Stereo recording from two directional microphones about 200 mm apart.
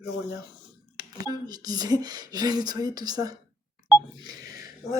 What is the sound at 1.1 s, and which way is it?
Speech, 20° right (ahead or behind).